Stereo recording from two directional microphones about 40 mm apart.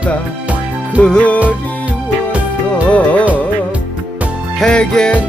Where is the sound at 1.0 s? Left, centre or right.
Left.